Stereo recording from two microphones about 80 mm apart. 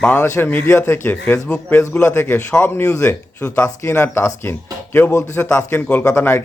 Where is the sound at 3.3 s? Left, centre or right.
Left.